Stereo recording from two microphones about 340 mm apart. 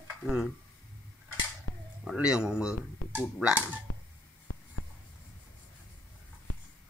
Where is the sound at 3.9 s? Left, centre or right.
Left.